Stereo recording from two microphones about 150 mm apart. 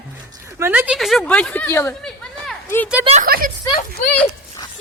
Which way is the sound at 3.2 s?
70° right (ahead or behind).